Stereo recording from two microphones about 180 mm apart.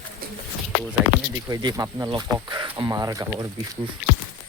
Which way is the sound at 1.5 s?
20° right (ahead or behind).